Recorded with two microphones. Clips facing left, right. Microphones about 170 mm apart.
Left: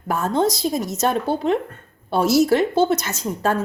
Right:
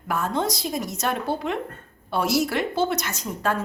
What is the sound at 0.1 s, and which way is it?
A woman's voice, 25° left (ahead or behind).